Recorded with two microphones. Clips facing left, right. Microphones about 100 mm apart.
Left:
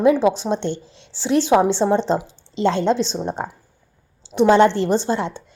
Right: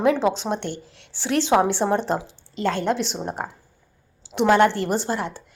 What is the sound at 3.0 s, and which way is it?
Speech, 15° right (ahead or behind).